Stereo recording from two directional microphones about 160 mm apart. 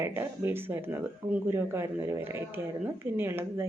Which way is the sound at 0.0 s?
15° right (ahead or behind).